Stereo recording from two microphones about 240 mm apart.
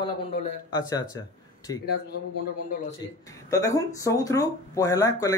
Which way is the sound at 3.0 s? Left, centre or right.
Centre.